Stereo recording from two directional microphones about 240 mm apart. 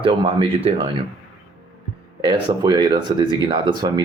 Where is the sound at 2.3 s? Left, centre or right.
Centre.